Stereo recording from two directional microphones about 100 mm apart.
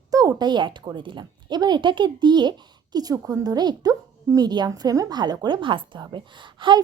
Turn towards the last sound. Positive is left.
turn(degrees=-50)  # may be behind; listen again after turning